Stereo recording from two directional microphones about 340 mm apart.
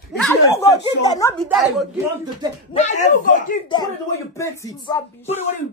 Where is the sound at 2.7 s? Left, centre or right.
Centre.